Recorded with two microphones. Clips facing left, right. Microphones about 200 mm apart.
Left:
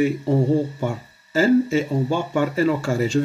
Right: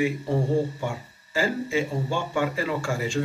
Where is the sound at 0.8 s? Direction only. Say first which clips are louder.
Left 5 dB; 40° left (ahead or behind).